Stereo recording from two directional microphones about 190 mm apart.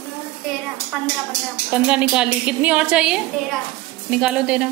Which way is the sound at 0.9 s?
Centre (ahead or behind).